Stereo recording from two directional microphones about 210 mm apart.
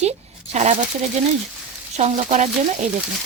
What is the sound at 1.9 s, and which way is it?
Speech, 35° right (ahead or behind).